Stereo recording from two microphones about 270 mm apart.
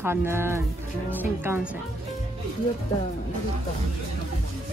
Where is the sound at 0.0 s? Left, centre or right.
Centre.